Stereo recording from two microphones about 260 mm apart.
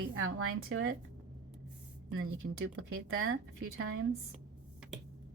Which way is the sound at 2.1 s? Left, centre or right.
Right.